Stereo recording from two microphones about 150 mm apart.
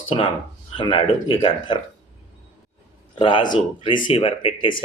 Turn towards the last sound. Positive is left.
turn(degrees=35)  # may be behind; listen again after turning